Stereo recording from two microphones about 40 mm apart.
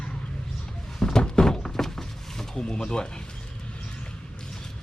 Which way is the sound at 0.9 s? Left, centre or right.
Centre.